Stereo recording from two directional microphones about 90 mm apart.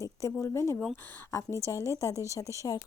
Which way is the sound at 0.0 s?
35° left (ahead or behind).